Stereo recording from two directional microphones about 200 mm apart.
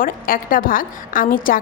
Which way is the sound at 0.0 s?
45° left (ahead or behind).